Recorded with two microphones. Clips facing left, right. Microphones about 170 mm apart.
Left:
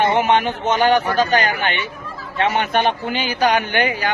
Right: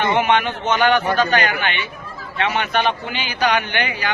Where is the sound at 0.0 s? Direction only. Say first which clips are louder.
Left 1 dB; 40° left (ahead or behind).